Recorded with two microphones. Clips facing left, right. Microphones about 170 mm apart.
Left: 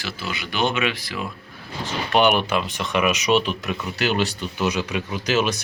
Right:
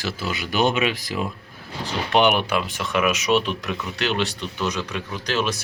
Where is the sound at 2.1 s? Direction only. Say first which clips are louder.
Even; 15° right (ahead or behind).